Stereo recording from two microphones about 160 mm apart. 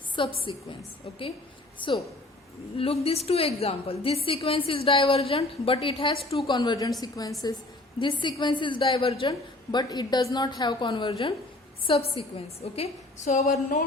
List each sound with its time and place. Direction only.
0.2 s a woman's voice: 30° left (ahead or behind)
1.8 s a woman's voice: 30° left (ahead or behind)
13.2 s a woman's voice: 50° left (ahead or behind)